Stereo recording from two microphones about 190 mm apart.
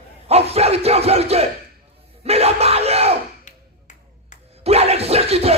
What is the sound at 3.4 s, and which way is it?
Finger snapping, 40° left (ahead or behind).